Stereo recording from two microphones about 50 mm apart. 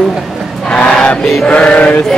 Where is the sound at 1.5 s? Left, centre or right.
Left.